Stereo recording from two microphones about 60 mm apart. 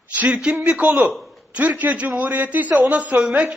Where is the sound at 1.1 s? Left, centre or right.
Centre.